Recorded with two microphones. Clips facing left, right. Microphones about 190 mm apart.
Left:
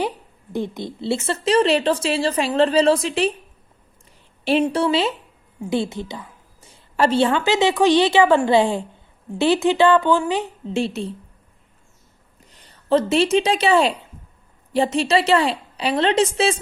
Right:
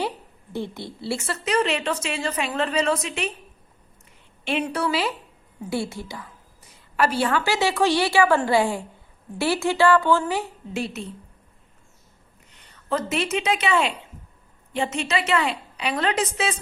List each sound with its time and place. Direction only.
0.5 s a woman's voice: 15° left (ahead or behind); by 3.3 s 30° left (ahead or behind)
4.4 s a woman's voice: 30° left (ahead or behind)
12.5 s a woman's voice: 35° left (ahead or behind)